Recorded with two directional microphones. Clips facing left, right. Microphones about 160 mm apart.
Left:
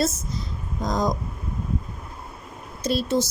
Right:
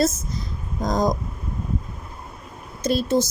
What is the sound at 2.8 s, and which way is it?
Speech, 45° right (ahead or behind).